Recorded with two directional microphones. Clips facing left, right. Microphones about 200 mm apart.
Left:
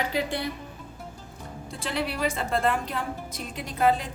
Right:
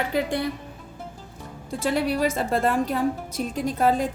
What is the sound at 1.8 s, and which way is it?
A woman's voice, 45° right (ahead or behind).